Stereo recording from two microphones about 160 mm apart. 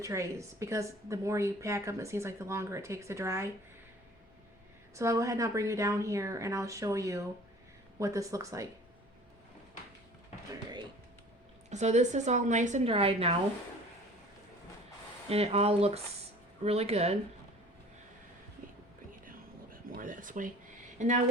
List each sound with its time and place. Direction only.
0.0 s a woman's voice: 20° right (ahead or behind)
4.9 s a woman's voice: 20° right (ahead or behind)
10.5 s a sound: 25° right (ahead or behind)
11.7 s a woman's voice: 45° right (ahead or behind)
12.9 s speech: 35° right (ahead or behind)
15.3 s speech: 40° right (ahead or behind)
19.2 s a sound: 60° right (ahead or behind)
21.0 s a woman's voice: 50° right (ahead or behind)